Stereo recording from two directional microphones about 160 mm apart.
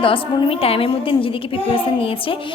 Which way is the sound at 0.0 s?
35° left (ahead or behind).